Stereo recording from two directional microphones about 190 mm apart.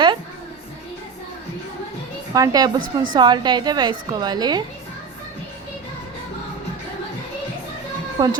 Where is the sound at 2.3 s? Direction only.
20° right (ahead or behind).